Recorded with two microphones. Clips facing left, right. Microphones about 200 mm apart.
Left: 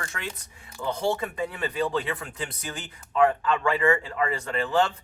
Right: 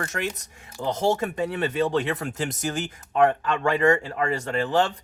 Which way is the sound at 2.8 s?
80° right.